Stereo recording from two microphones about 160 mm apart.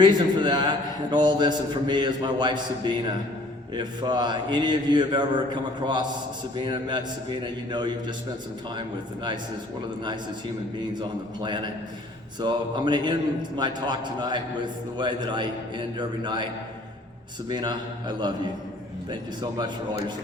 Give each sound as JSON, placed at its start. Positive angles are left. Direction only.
{"t": 0.0, "sound": "a man's voice", "side_deg": -30}
{"t": 11.0, "sound": "a man's voice", "side_deg": -30}
{"t": 17.5, "sound": "a man's voice", "side_deg": -25}
{"t": 19.1, "sound": "a man's voice", "side_deg": -30}